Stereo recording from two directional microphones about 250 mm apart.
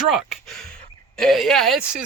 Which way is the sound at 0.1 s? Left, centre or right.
Centre.